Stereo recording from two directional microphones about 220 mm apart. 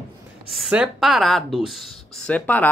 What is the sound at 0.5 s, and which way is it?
Speech, 5° right (ahead or behind).